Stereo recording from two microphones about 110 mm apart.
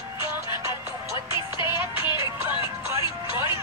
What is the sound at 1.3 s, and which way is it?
Music, 45° left (ahead or behind).